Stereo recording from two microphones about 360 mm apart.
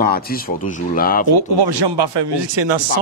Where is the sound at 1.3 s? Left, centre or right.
Right.